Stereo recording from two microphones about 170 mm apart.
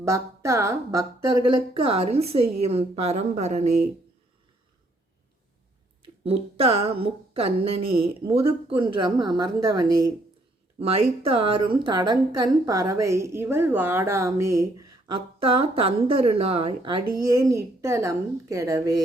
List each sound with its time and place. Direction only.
0.0 s speech: 15° right (ahead or behind); by 3.8 s 40° right (ahead or behind)
6.0 s speech: 35° right (ahead or behind)
10.8 s a woman's voice: 35° right (ahead or behind); by 15.1 s 20° right (ahead or behind)
15.4 s speech: 35° right (ahead or behind)
17.2 s a woman's voice: 20° right (ahead or behind)